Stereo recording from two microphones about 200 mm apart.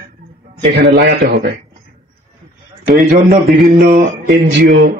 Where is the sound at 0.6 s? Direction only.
55° right (ahead or behind).